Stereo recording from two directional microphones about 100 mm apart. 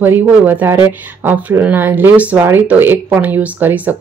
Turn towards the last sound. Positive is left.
turn(degrees=-20)  # may be behind; listen again after turning